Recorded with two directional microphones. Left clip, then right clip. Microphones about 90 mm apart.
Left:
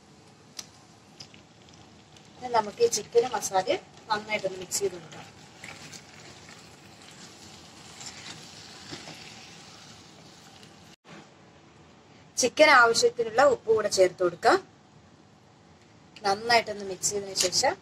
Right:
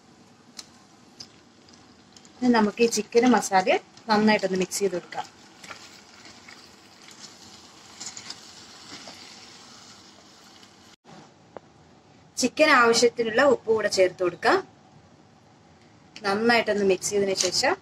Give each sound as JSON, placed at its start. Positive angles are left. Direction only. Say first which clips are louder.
{"t": 2.4, "sound": "a woman's voice", "louder": "right 3 dB", "side_deg": -30}
{"t": 5.7, "sound": "a sound", "louder": "right 2 dB", "side_deg": -35}
{"t": 7.6, "sound": "vehicle", "louder": "right 3 dB", "side_deg": -35}
{"t": 12.7, "sound": "speech", "louder": "right 1 dB", "side_deg": -30}
{"t": 16.2, "sound": "speech", "louder": "right 2 dB", "side_deg": -25}